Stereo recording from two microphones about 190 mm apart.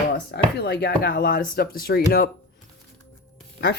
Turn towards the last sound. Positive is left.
turn(degrees=65)  # may be behind; listen again after turning